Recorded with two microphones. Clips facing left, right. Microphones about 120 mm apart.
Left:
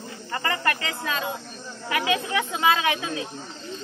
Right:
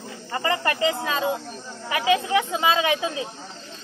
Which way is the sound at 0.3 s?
25° right (ahead or behind).